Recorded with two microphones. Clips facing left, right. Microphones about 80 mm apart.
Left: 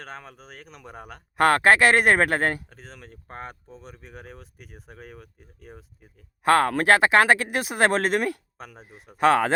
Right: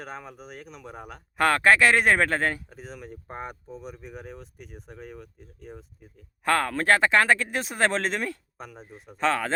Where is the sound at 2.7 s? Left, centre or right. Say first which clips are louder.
Right 5 dB; centre.